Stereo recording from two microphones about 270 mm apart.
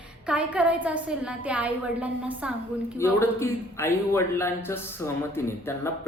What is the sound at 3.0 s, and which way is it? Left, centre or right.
Speech, centre.